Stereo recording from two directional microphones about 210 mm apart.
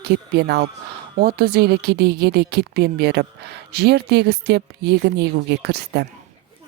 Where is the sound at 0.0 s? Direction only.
50° right (ahead or behind).